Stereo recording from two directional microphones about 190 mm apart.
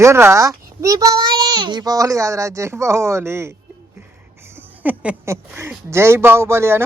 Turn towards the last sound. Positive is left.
turn(degrees=-15)  # may be behind; listen again after turning